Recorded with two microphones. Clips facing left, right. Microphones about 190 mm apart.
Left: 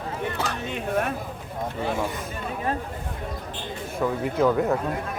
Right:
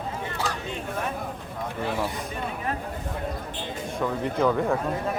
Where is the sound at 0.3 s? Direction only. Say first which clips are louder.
Left 1 dB; 65° left (ahead or behind).